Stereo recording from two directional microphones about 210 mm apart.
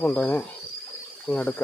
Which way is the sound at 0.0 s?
5° left (ahead or behind).